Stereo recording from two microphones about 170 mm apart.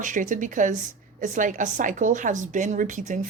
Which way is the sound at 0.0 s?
50° right (ahead or behind).